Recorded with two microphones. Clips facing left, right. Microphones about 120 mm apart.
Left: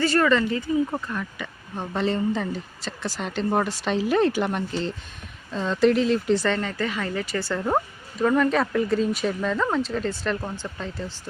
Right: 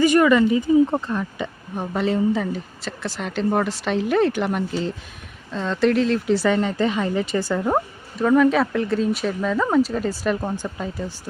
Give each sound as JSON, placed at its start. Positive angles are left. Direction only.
{"t": 0.0, "sound": "speech", "side_deg": -15}
{"t": 0.9, "sound": "speech", "side_deg": -25}
{"t": 6.6, "sound": "speech", "side_deg": -20}